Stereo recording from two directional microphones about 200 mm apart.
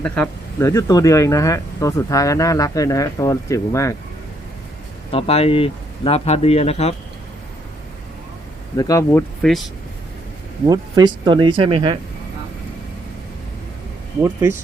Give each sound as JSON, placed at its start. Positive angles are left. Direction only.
{"t": 0.0, "sound": "speech", "side_deg": 10}
{"t": 5.1, "sound": "speech", "side_deg": 30}
{"t": 8.7, "sound": "speech", "side_deg": 20}
{"t": 9.4, "sound": "speech", "side_deg": 0}
{"t": 10.7, "sound": "speech", "side_deg": -20}